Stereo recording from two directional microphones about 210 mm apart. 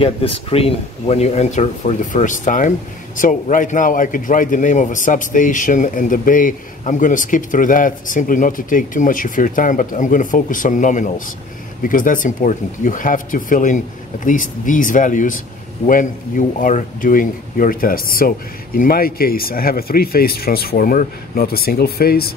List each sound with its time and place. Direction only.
0.0 s a man's voice: 25° left (ahead or behind); by 22.3 s 45° left (ahead or behind)